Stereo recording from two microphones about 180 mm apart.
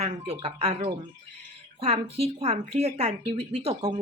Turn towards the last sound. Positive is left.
turn(degrees=-35)  # may be behind; listen again after turning